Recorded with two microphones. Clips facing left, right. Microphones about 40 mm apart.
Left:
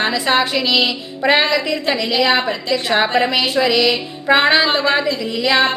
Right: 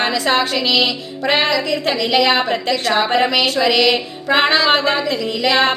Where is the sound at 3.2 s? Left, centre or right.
Centre.